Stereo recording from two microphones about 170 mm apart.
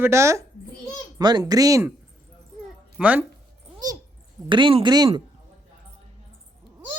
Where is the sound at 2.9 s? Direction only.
10° right (ahead or behind).